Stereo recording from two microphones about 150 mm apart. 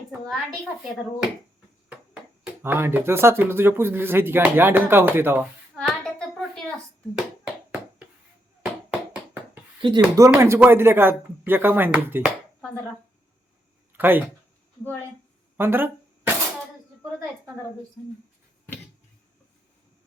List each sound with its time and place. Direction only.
2.4 s speech: 15° right (ahead or behind)
7.2 s hands: 5° right (ahead or behind)
8.9 s a sound: 10° right (ahead or behind)
9.8 s speech: 35° right (ahead or behind)
10.2 s speech: 20° right (ahead or behind)
13.9 s speech: 15° right (ahead or behind)
15.5 s a sound: 15° right (ahead or behind)